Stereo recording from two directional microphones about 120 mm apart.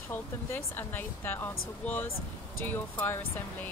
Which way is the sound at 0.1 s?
20° left (ahead or behind).